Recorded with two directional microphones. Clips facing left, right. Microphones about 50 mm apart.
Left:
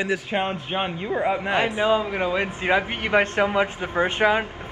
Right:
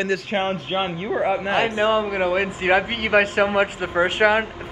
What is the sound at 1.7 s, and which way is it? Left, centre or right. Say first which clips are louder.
A man's voice: right 1 dB; right.